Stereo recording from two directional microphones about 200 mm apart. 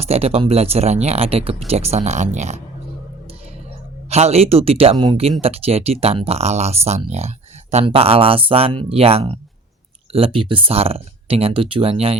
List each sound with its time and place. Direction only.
0.0 s speech: 30° right (ahead or behind)
4.1 s speech: 30° right (ahead or behind)